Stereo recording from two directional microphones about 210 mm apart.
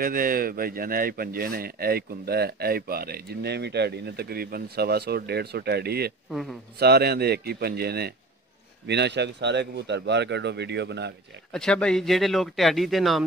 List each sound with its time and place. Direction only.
0.0 s a man's voice: 45° right (ahead or behind)
11.5 s speech: 5° left (ahead or behind)